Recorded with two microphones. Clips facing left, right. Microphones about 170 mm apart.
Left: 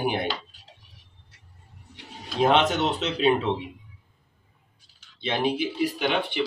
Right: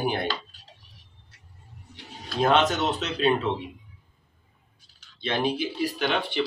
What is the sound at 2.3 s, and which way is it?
Speech, 20° left (ahead or behind).